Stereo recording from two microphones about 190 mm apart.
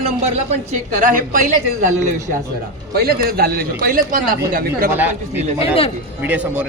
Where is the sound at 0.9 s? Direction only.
45° right (ahead or behind).